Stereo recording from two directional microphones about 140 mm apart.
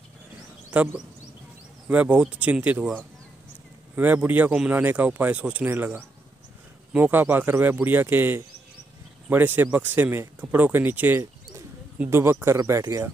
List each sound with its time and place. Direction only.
0.7 s speech: 10° right (ahead or behind)